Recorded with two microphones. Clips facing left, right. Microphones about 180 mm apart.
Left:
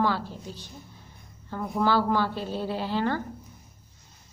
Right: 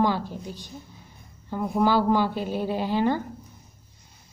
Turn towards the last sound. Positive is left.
turn(degrees=-15)  # may be behind; listen again after turning